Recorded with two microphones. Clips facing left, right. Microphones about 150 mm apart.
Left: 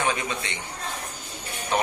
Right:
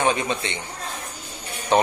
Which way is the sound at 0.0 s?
25° right (ahead or behind).